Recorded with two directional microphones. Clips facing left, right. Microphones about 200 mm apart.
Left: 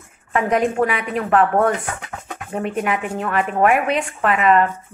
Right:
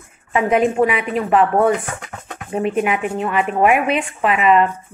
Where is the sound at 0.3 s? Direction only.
10° right (ahead or behind).